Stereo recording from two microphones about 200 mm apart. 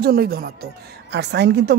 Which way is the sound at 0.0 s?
50° right (ahead or behind).